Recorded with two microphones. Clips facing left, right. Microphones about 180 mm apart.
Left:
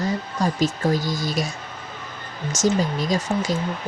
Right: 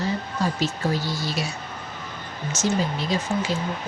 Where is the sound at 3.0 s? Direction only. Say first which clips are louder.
Left 2 dB; 40° left (ahead or behind).